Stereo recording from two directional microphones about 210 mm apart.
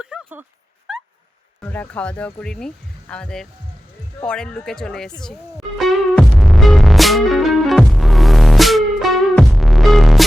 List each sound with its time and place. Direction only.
0.0 s a sound: 5° right (ahead or behind)
1.6 s speech: 10° left (ahead or behind)
5.2 s music: centre (ahead or behind)